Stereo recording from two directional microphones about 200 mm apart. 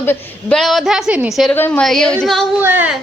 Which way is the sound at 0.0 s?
10° left (ahead or behind).